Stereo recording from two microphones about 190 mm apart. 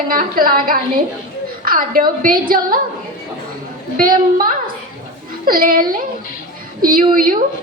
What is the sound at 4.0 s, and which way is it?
A woman's voice, 50° right (ahead or behind).